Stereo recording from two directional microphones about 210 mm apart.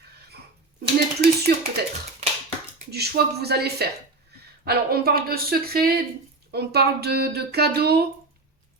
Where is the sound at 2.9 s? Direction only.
50° right (ahead or behind).